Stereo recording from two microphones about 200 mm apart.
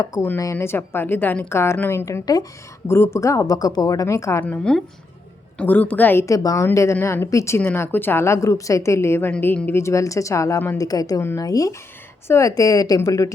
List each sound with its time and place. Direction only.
0.0 s a woman's voice: 15° left (ahead or behind)